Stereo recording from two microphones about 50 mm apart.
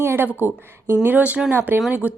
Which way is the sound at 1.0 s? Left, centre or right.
Right.